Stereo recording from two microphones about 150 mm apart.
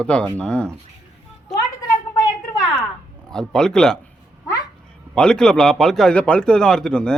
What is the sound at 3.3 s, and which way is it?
Speech, 5° left (ahead or behind).